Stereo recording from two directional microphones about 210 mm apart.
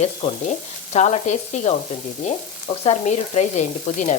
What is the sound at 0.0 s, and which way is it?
Frying, 30° left (ahead or behind).